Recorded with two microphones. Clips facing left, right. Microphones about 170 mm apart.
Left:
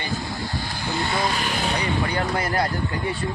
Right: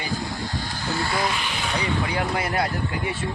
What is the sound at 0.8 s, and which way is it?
Speech, 20° left (ahead or behind).